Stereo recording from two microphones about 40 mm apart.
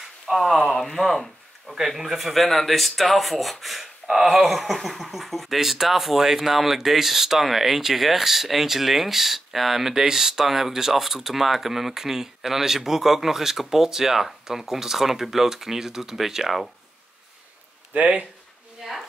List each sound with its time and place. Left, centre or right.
0.3 s speech: centre
17.9 s speech: right
18.8 s speech: centre